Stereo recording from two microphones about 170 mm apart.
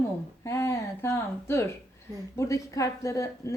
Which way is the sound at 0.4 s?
15° left (ahead or behind).